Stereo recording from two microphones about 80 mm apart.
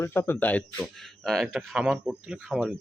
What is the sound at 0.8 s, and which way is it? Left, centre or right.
Speech, centre.